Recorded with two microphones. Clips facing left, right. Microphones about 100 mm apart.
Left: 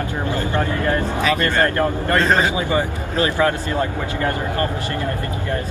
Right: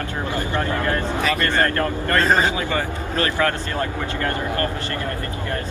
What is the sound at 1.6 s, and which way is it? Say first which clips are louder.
Speech: left 3 dB; 20° left (ahead or behind).